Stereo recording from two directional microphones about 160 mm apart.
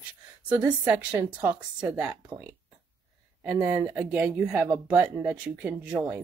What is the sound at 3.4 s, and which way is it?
A woman's voice, 5° right (ahead or behind).